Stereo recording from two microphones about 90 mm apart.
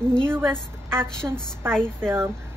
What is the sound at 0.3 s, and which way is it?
Speech, 25° right (ahead or behind).